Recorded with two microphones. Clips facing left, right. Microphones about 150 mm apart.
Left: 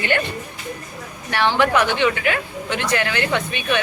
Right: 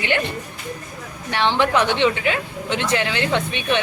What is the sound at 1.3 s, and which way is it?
Speech, 20° right (ahead or behind).